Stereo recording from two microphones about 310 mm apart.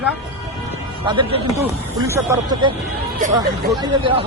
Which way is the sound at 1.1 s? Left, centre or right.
Centre.